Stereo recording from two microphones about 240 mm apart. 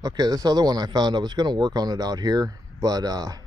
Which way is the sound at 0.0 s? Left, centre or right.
Centre.